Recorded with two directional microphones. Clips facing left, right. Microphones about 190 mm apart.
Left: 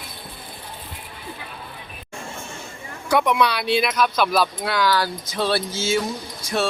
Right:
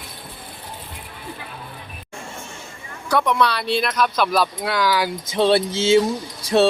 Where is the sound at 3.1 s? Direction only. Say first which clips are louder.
Even; 15° left (ahead or behind); by 5.1 s 10° right (ahead or behind).